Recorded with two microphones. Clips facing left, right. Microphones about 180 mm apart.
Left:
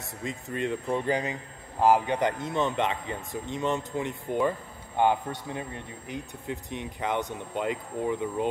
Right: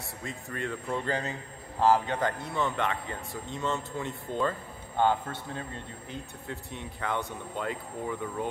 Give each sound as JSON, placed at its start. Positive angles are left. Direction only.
{"t": 0.2, "sound": "a man's voice", "side_deg": 20}